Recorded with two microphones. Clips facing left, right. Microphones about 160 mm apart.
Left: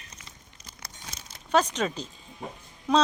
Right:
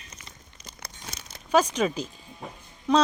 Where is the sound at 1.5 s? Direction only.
5° right (ahead or behind).